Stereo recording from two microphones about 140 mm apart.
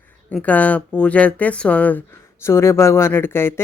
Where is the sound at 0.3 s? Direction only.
10° left (ahead or behind).